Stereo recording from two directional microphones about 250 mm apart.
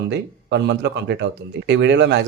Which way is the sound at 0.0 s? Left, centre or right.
Right.